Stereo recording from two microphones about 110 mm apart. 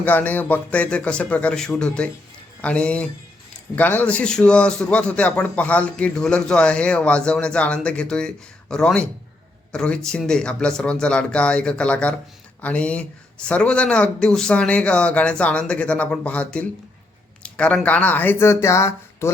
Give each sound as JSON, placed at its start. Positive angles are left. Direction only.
{"t": 0.0, "sound": "a man's voice", "side_deg": 15}
{"t": 17.4, "sound": "a sound", "side_deg": 10}
{"t": 17.8, "sound": "speech", "side_deg": 15}